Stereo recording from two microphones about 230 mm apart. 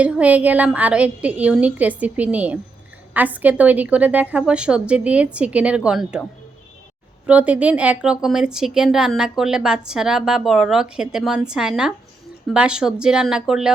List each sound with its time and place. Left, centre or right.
0.0 s speech: centre
7.3 s speech: centre